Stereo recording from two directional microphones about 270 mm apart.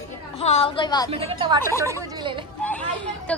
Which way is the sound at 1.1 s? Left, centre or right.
Right.